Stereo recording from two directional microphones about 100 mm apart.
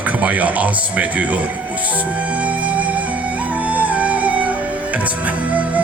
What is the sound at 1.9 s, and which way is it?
Music, 15° right (ahead or behind).